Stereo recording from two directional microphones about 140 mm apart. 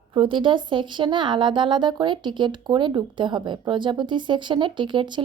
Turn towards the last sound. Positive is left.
turn(degrees=-35)  # may be behind; listen again after turning